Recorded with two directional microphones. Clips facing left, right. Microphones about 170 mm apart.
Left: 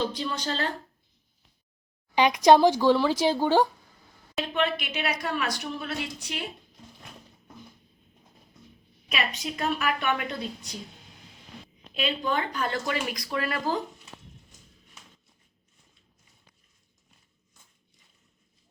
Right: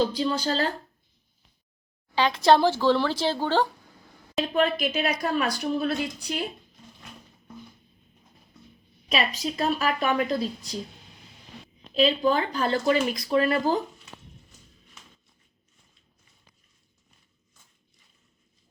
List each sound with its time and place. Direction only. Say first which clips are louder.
0.0 s a woman's voice: right 5 dB; 35° right (ahead or behind)
2.1 s speech: left 2 dB; 15° left (ahead or behind)
4.5 s a woman's voice: right 4 dB; 35° right (ahead or behind)
9.4 s a woman's voice: right 3 dB; 30° right (ahead or behind)
11.9 s speech: right 6 dB; 35° right (ahead or behind)